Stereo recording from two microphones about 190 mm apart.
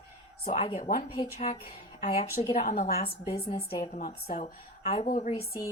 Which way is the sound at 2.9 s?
30° left (ahead or behind).